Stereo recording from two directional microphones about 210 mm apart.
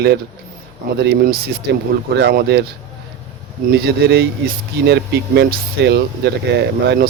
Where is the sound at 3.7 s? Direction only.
50° right (ahead or behind).